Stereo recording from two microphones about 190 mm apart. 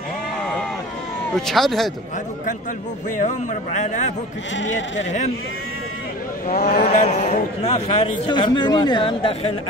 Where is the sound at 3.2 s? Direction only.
40° left (ahead or behind).